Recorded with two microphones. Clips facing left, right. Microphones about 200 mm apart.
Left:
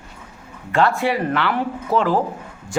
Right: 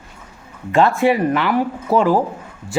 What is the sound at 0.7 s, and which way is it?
Speech, 15° right (ahead or behind).